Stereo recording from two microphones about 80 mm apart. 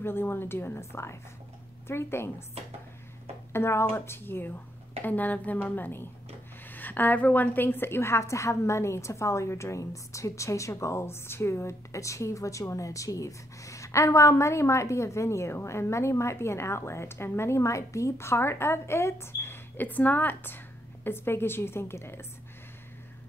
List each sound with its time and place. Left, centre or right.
0.0 s a woman's voice: left
3.5 s a woman's voice: left